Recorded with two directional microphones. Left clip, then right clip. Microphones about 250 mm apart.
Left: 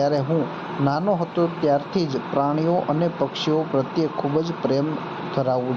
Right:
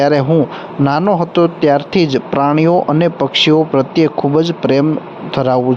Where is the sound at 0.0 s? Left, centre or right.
Right.